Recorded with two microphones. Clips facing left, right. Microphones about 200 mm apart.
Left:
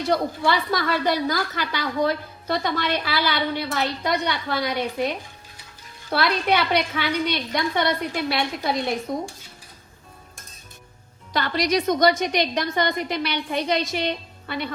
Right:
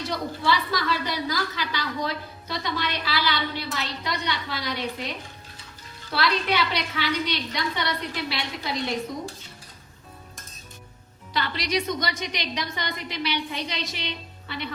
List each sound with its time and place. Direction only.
0.1 s a woman's voice: 55° left (ahead or behind)
11.3 s a woman's voice: 45° left (ahead or behind)